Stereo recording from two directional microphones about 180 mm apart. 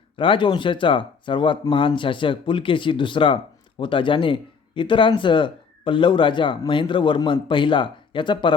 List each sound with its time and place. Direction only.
0.2 s speech: 25° left (ahead or behind)